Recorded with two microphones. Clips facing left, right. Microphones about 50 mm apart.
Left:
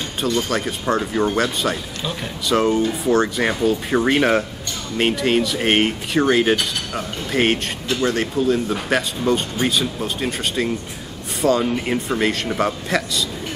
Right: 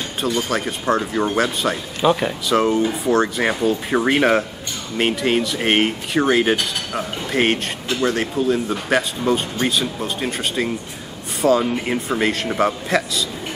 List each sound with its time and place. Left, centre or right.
0.2 s speech: centre
2.0 s speech: right
2.4 s speech: centre